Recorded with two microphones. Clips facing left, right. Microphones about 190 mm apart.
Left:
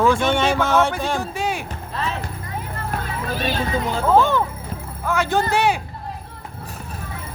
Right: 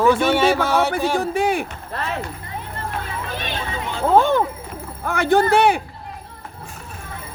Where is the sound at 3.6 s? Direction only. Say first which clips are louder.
Left 5 dB; 35° left (ahead or behind).